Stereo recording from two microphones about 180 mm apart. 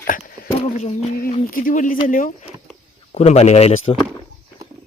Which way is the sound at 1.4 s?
50° left (ahead or behind).